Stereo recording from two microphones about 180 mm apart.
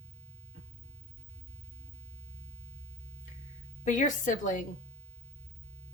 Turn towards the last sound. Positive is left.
turn(degrees=45)  # may be behind; listen again after turning